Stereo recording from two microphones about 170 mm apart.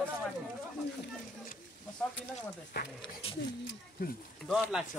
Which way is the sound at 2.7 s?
80° left.